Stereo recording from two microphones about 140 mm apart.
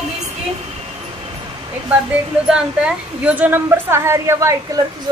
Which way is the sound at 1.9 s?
5° right (ahead or behind).